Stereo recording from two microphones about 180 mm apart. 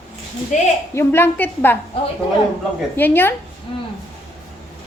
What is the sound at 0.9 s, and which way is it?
Speech, 15° left (ahead or behind).